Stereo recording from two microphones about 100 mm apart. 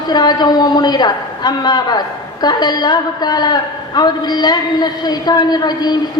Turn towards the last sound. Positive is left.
turn(degrees=45)  # may be behind; listen again after turning